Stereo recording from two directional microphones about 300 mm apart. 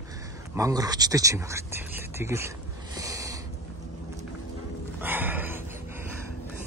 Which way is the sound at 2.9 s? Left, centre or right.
Centre.